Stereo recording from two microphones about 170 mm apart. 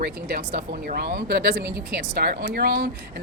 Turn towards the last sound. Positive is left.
turn(degrees=-65)  # may be behind; listen again after turning